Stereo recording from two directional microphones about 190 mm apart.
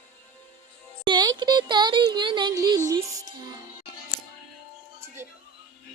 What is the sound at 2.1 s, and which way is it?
Music, 25° right (ahead or behind).